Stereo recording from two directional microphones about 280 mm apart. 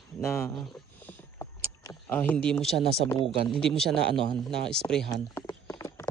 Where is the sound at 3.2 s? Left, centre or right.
Centre.